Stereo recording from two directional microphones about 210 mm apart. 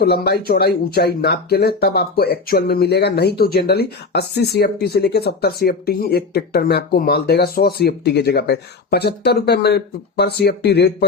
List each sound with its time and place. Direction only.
0.0 s speech: 50° left (ahead or behind)